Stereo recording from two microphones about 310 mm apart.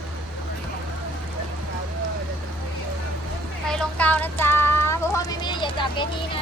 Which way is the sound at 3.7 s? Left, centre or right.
Centre.